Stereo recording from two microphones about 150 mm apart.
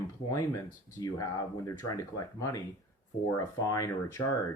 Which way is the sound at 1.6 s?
25° left (ahead or behind).